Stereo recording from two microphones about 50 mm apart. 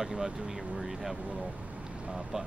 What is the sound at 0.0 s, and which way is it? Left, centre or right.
Speech, centre.